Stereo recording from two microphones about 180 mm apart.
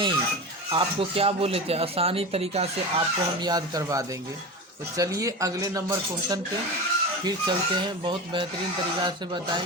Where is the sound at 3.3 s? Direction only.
25° right (ahead or behind).